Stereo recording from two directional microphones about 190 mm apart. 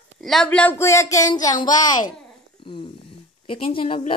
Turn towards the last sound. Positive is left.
turn(degrees=30)  # may be behind; listen again after turning